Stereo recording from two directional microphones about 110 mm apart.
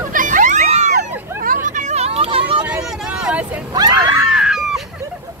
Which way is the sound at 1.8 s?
80° right.